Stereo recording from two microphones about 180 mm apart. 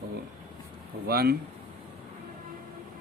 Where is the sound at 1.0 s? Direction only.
60° right (ahead or behind).